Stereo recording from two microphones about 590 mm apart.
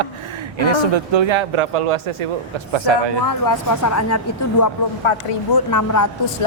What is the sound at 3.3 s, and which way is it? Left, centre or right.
A woman's voice, left.